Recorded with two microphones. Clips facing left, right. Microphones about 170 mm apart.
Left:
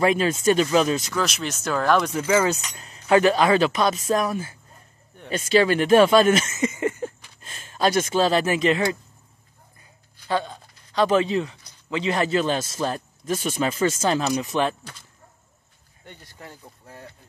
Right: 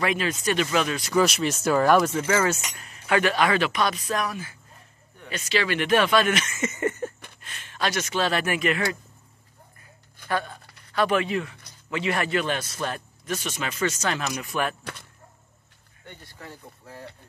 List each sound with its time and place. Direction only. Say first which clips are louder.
0.0 s speech: left 6 dB; 30° left (ahead or behind)
1.2 s speech: right 4 dB; centre (ahead or behind)
2.2 s speech: left 3 dB; 15° left (ahead or behind)
2.7 s speech: left 6 dB; 30° left (ahead or behind)
5.4 s speech: left 7 dB; 40° left (ahead or behind)
5.9 s speech: left 5 dB; 30° left (ahead or behind)
6.6 s a sound: left 2 dB; 10° left (ahead or behind)
8.3 s speech: left 5 dB; 25° left (ahead or behind)
10.2 s speech: left 3 dB; 20° left (ahead or behind)